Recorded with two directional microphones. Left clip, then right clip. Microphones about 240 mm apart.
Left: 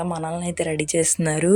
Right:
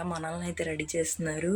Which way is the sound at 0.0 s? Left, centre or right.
Left.